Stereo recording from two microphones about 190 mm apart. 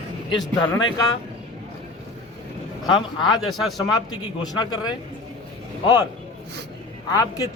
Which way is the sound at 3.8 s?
20° left (ahead or behind).